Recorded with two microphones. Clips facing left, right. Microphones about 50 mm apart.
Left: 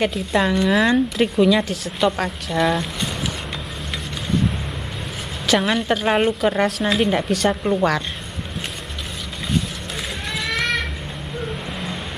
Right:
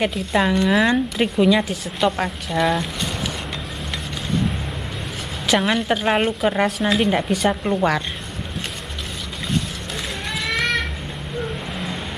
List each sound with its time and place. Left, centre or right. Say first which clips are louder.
0.0 s speech: even; centre
5.5 s speech: even; centre
10.3 s a sound: right 1 dB; centre